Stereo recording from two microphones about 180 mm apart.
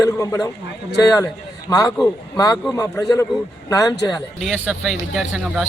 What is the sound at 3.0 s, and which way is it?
Speech, 20° left (ahead or behind).